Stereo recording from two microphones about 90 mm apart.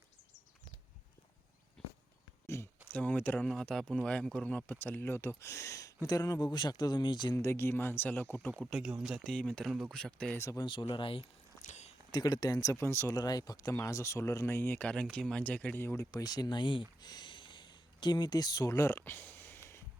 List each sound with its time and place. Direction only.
1.8 s a sound: 5° left (ahead or behind)
2.5 s a sound: 30° left (ahead or behind)
2.9 s speech: 20° left (ahead or behind)
3.4 s speech: 5° left (ahead or behind); by 7.3 s 55° left (ahead or behind)
7.3 s speech: 25° left (ahead or behind)
8.7 s speech: 5° right (ahead or behind)
9.3 s speech: 10° left (ahead or behind)
10.3 s speech: 35° left (ahead or behind)
10.6 s speech: 65° left (ahead or behind)
10.9 s speech: 80° left
12.1 s speech: 45° left (ahead or behind); by 14.8 s 25° left (ahead or behind)
14.8 s speech: 15° left (ahead or behind)
16.1 s speech: 45° left (ahead or behind)
17.0 s a sound: 50° left (ahead or behind); by 19.5 s 20° left (ahead or behind)